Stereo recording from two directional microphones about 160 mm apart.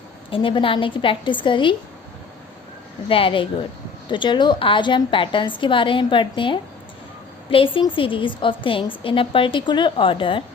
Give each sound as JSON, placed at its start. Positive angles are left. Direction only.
{"t": 0.3, "sound": "a woman's voice", "side_deg": 35}
{"t": 3.1, "sound": "a woman's voice", "side_deg": 35}